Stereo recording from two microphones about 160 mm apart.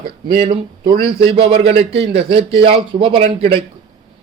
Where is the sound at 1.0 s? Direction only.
35° right (ahead or behind).